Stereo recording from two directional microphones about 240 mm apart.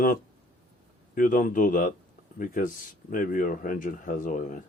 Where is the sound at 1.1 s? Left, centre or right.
Left.